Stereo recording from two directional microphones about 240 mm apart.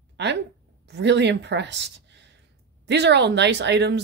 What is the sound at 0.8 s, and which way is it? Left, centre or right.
Speech, right.